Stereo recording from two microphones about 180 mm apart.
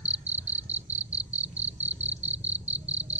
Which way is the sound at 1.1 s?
35° right (ahead or behind).